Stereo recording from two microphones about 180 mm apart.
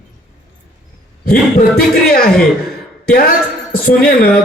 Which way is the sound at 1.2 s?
55° left (ahead or behind).